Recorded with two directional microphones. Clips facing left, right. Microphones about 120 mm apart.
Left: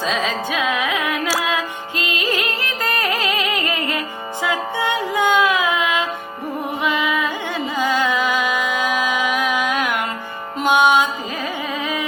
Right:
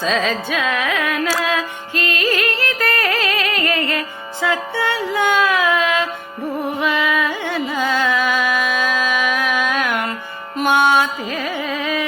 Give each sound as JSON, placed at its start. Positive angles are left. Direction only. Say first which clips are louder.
{"t": 0.0, "sound": "carnatic music", "louder": "right 2 dB", "side_deg": 15}
{"t": 1.3, "sound": "music", "louder": "right 1 dB", "side_deg": 15}
{"t": 11.7, "sound": "carnatic music", "louder": "right 3 dB", "side_deg": 20}